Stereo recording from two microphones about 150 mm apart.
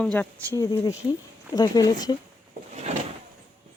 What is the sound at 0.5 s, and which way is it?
Speech, 20° left (ahead or behind).